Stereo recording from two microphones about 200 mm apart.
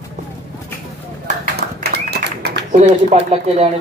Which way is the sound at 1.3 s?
45° right (ahead or behind).